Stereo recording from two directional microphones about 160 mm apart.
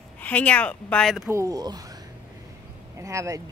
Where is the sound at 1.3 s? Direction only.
20° right (ahead or behind).